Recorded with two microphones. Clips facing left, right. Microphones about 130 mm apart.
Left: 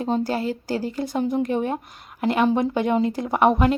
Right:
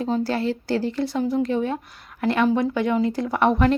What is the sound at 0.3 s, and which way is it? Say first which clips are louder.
A woman's voice: right 1 dB; 15° left (ahead or behind).